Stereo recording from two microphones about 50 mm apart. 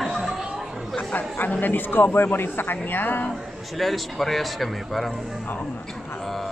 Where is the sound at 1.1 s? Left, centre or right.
Left.